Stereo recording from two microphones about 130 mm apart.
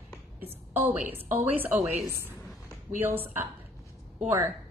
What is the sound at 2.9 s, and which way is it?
Speech, 15° right (ahead or behind).